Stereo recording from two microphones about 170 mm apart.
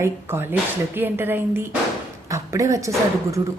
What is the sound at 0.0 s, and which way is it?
A woman's voice, 15° right (ahead or behind).